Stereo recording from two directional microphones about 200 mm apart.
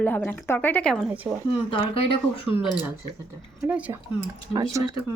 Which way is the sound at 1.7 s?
25° left (ahead or behind).